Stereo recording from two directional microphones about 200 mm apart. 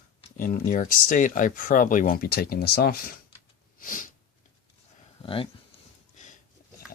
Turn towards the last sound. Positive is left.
turn(degrees=25)  # may be behind; listen again after turning